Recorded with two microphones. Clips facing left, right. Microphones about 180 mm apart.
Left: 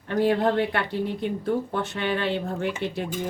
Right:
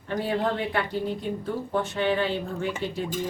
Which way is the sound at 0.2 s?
65° left (ahead or behind).